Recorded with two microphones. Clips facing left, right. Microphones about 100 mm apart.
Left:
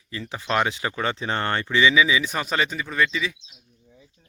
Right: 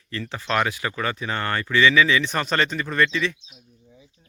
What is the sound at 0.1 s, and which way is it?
Speech, 15° left (ahead or behind).